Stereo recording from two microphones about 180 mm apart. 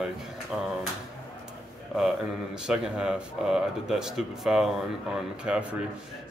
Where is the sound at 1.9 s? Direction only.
Centre (ahead or behind).